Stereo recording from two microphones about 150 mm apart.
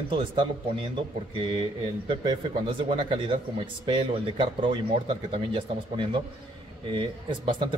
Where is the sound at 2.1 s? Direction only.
35° right (ahead or behind).